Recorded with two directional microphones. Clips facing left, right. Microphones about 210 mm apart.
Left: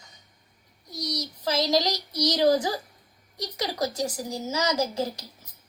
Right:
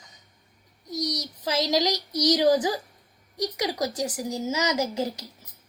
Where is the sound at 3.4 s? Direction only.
15° right (ahead or behind).